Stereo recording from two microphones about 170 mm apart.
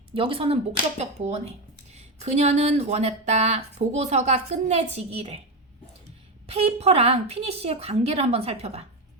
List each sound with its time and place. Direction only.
0.1 s speech: 30° right (ahead or behind)
6.5 s speech: 35° right (ahead or behind)